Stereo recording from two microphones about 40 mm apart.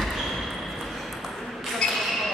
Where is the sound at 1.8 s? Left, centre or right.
Left.